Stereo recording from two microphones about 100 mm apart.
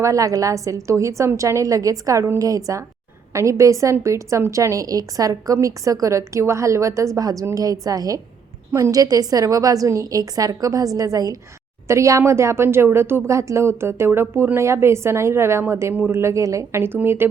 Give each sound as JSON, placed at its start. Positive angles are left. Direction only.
{"t": 0.0, "sound": "a woman's voice", "side_deg": -35}